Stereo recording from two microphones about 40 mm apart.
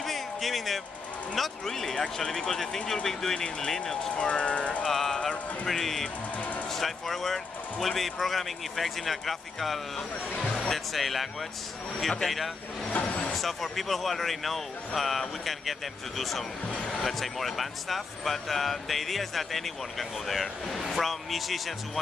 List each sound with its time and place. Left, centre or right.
0.0 s a sound: centre
1.3 s speech: centre; by 4.8 s left
4.8 s music: centre
5.7 s speech: centre
12.9 s vehicle: left
13.3 s speech: centre